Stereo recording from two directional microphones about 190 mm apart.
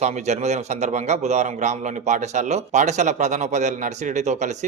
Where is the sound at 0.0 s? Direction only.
35° right (ahead or behind).